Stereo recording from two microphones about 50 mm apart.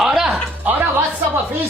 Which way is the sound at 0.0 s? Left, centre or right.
Centre.